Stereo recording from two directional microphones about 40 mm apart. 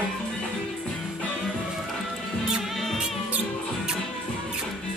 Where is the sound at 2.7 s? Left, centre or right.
Centre.